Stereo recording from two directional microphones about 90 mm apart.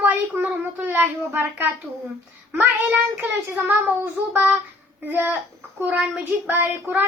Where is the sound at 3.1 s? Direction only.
30° right (ahead or behind).